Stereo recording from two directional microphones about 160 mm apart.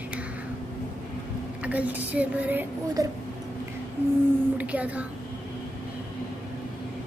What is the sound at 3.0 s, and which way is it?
Speech, 20° right (ahead or behind).